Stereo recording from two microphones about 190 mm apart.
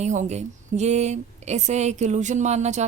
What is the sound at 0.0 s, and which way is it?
A woman's voice, 40° right (ahead or behind).